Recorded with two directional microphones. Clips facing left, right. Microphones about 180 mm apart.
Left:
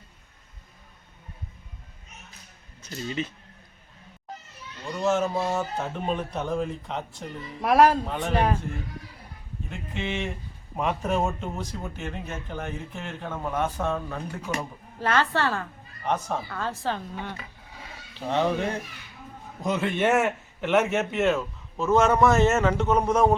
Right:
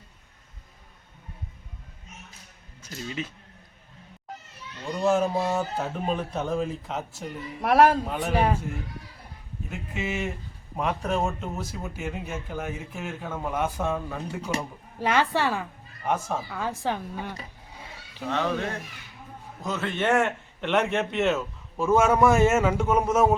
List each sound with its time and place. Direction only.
2.8 s speech: 5° right (ahead or behind)
5.5 s speech: 5° right (ahead or behind)
9.6 s speech: 5° right (ahead or behind)
18.3 s speech: 20° left (ahead or behind); by 23.3 s 5° right (ahead or behind)